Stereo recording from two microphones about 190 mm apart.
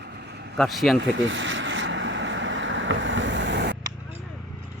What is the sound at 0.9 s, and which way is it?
Vehicle, 75° right (ahead or behind).